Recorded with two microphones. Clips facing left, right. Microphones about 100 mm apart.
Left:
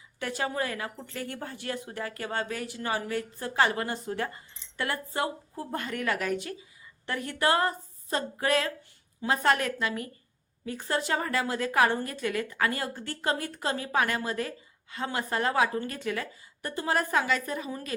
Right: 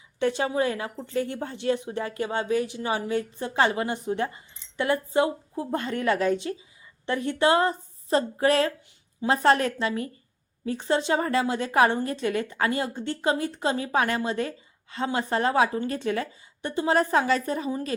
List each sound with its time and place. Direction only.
0.2 s a woman's voice: 25° right (ahead or behind)